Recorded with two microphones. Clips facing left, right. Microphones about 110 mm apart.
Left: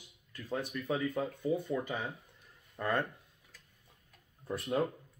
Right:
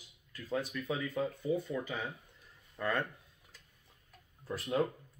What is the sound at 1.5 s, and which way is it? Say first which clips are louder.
Speech: left 2 dB; 20° left (ahead or behind).